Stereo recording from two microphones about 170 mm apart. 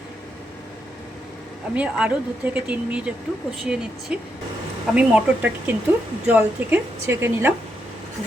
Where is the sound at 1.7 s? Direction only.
10° right (ahead or behind).